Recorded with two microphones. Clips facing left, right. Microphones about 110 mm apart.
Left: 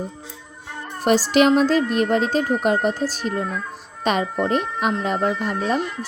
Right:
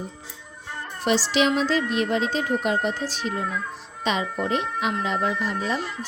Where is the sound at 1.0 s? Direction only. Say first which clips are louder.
Left 5 dB; 45° left (ahead or behind).